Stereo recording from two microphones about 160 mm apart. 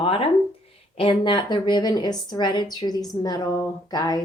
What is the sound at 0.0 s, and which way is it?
A woman's voice, 35° left (ahead or behind).